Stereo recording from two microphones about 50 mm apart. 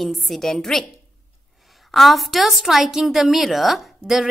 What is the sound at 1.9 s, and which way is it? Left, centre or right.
A woman's voice, centre.